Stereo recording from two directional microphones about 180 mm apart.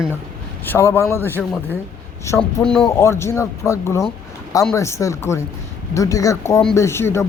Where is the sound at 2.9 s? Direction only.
15° left (ahead or behind).